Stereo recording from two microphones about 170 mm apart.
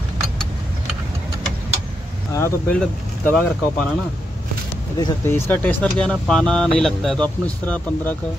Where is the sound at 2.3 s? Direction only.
15° left (ahead or behind).